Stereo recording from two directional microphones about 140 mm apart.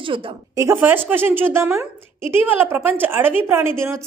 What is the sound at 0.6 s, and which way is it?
A woman's voice, 15° right (ahead or behind).